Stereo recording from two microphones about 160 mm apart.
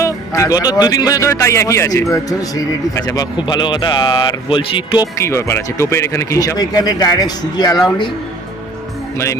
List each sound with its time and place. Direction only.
0.0 s speech: 20° left (ahead or behind)
5.1 s speech: 15° left (ahead or behind)
9.1 s speech: 15° left (ahead or behind)